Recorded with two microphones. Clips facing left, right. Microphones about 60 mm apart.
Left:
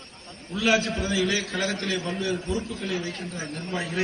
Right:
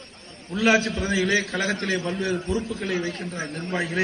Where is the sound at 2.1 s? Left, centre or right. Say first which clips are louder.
Right 2 dB; right.